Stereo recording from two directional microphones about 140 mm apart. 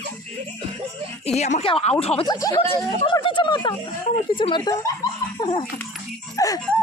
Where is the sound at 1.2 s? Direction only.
50° left (ahead or behind).